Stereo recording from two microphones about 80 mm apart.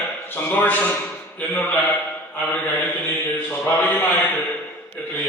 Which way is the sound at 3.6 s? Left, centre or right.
Left.